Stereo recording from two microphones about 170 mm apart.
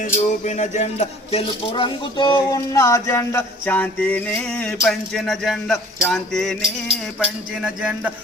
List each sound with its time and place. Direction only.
0.0 s speech: 45° left (ahead or behind); by 2.6 s 30° left (ahead or behind)
2.7 s a sound: 15° left (ahead or behind)
4.9 s music: centre (ahead or behind)